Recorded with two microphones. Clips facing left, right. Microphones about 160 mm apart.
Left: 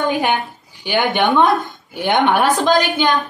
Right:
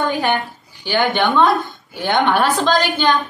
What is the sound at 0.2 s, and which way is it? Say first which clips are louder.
A woman's voice: even; 15° left (ahead or behind).